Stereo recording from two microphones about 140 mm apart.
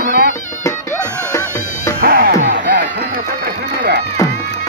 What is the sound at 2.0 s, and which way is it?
Music, 90° right.